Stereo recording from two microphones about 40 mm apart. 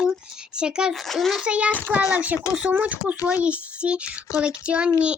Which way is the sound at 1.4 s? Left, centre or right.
Right.